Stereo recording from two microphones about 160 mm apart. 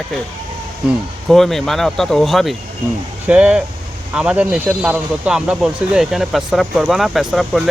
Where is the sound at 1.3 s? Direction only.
Centre (ahead or behind).